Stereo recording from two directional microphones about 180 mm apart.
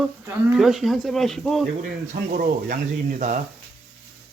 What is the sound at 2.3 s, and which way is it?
Speech, 50° right (ahead or behind).